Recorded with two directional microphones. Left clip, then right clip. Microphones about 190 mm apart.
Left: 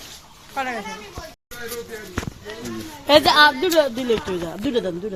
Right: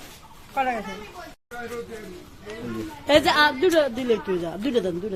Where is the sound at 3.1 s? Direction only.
30° left (ahead or behind).